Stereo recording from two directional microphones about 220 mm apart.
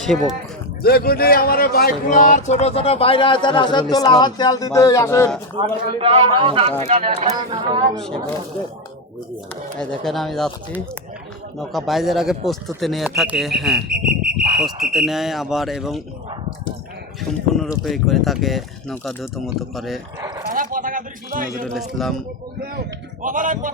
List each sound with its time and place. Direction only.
0.0 s speech: centre (ahead or behind)
0.8 s a man's voice: 45° left (ahead or behind); by 5.4 s 10° left (ahead or behind)
6.0 s speech: 20° right (ahead or behind)
7.9 s speech: centre (ahead or behind)
9.7 s speech: 5° left (ahead or behind)
13.9 s a sound: 40° right (ahead or behind)
14.6 s speech: centre (ahead or behind)
17.8 s speech: centre (ahead or behind)
20.5 s speech: 40° right (ahead or behind)
21.6 s speech: centre (ahead or behind)
23.2 s speech: 35° right (ahead or behind)